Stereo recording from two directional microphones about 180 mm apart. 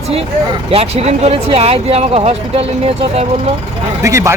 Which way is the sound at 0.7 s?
35° right (ahead or behind).